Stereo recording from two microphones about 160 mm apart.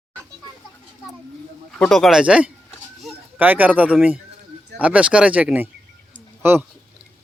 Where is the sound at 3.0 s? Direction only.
10° right (ahead or behind).